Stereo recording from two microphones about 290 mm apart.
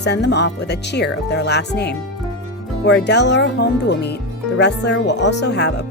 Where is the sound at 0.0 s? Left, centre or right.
Left.